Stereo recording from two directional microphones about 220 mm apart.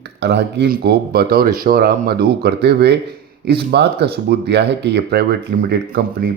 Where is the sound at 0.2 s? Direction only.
50° right (ahead or behind).